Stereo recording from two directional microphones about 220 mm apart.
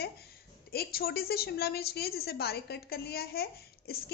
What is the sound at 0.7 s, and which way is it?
A woman's voice, 45° left (ahead or behind).